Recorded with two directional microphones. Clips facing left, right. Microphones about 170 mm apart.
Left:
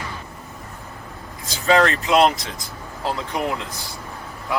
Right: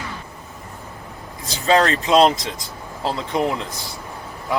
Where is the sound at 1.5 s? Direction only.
25° right (ahead or behind).